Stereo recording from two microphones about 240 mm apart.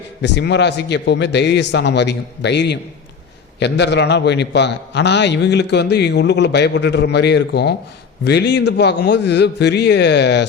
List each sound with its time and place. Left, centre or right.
0.2 s a man's voice: left